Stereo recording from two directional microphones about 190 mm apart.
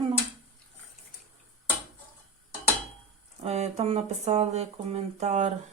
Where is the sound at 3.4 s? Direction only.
35° right (ahead or behind).